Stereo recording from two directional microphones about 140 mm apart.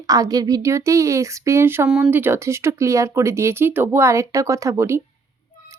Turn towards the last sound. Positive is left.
turn(degrees=-20)  # may be behind; listen again after turning